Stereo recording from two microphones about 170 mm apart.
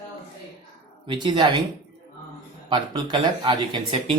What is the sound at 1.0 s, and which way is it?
Speech, 30° right (ahead or behind).